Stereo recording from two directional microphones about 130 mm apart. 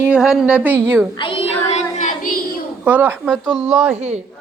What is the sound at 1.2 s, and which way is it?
Child singing, 40° left (ahead or behind).